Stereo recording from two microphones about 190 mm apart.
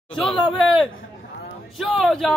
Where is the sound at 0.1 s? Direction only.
Centre (ahead or behind).